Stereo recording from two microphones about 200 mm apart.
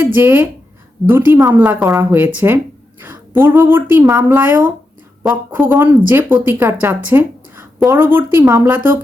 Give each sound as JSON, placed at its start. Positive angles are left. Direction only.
{"t": 0.0, "sound": "speech", "side_deg": -10}